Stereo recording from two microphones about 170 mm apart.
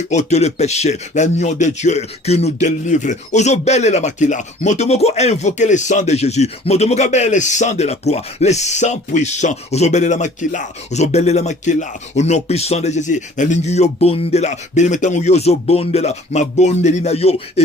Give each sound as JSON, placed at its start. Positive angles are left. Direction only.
{"t": 0.1, "sound": "speech", "side_deg": 40}